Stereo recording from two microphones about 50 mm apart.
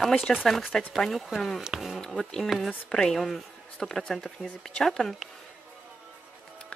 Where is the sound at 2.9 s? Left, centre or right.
Centre.